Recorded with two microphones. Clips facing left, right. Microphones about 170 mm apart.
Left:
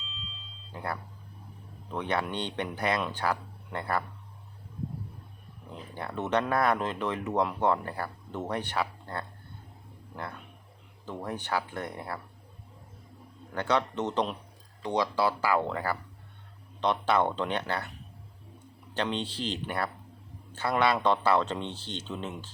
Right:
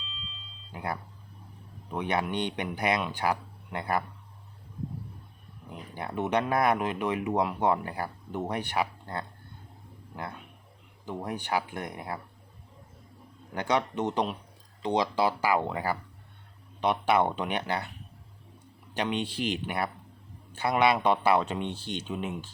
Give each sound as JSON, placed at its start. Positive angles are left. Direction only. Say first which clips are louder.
{"t": 0.7, "sound": "speech", "louder": "right 1 dB", "side_deg": -15}
{"t": 5.7, "sound": "speech", "louder": "right 2 dB", "side_deg": -15}
{"t": 11.0, "sound": "speech", "louder": "right 1 dB", "side_deg": -15}
{"t": 13.5, "sound": "speech", "louder": "even", "side_deg": -15}
{"t": 19.1, "sound": "speech", "louder": "right 3 dB", "side_deg": -10}